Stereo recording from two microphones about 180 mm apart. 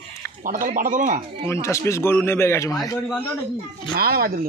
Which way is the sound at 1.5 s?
15° left (ahead or behind).